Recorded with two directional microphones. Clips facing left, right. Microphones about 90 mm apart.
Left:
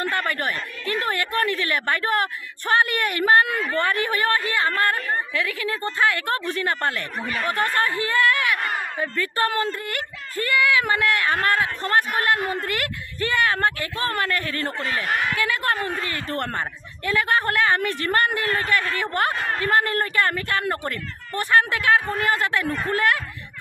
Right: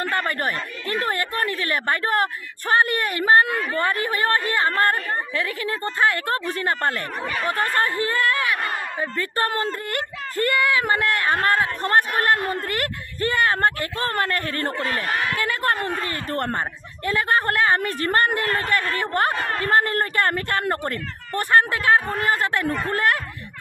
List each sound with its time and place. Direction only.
0.1 s a woman's voice: 35° right (ahead or behind)
11.8 s a woman's voice: 40° right (ahead or behind)
16.4 s a woman's voice: 30° right (ahead or behind)